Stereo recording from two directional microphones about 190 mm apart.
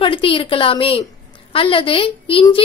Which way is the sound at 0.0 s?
30° left (ahead or behind).